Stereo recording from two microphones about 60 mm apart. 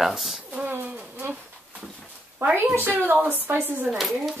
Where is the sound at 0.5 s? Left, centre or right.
Right.